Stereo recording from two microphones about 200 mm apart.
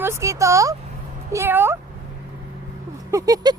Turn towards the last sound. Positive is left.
turn(degrees=-20)  # may be behind; listen again after turning